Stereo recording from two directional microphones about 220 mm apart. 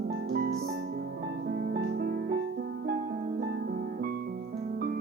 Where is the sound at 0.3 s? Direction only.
45° right (ahead or behind).